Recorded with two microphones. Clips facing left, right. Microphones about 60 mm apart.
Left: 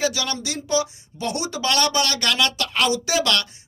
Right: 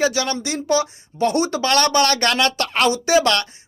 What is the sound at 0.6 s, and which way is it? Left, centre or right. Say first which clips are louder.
Speech: right 3 dB; right.